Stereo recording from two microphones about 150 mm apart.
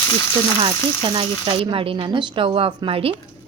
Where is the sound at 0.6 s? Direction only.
35° right (ahead or behind).